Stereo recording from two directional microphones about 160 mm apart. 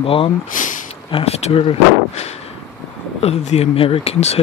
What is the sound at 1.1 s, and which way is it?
Speech, 40° left (ahead or behind).